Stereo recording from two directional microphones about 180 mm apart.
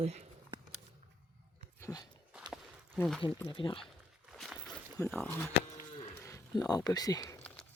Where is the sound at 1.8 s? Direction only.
20° left (ahead or behind).